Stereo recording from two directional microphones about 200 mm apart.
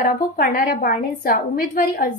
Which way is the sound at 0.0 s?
40° left (ahead or behind).